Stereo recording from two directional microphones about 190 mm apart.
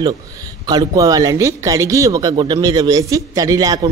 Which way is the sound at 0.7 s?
20° right (ahead or behind).